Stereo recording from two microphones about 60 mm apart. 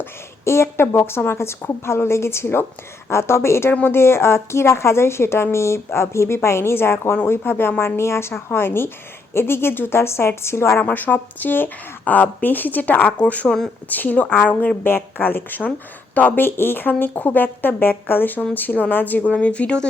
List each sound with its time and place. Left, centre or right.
0.0 s a woman's voice: left
7.9 s a woman's voice: left
10.8 s speech: left